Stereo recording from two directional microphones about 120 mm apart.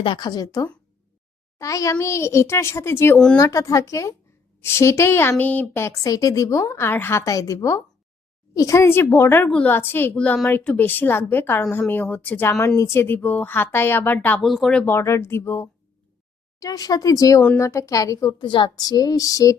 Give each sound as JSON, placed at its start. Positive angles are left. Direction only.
{"t": 0.0, "sound": "a woman's voice", "side_deg": 40}
{"t": 9.5, "sound": "speech", "side_deg": 10}
{"t": 14.4, "sound": "speech", "side_deg": 0}
{"t": 14.8, "sound": "a woman's voice", "side_deg": 20}
{"t": 16.6, "sound": "a woman's voice", "side_deg": 30}